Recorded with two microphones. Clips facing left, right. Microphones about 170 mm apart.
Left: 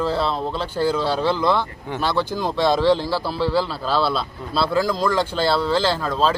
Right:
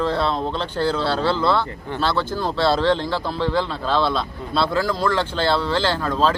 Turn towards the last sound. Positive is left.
turn(degrees=10)  # may be behind; listen again after turning